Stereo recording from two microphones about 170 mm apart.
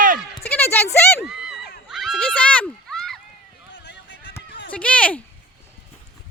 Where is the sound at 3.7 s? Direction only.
90° left.